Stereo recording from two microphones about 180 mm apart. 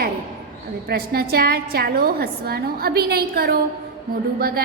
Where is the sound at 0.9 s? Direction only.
60° right (ahead or behind).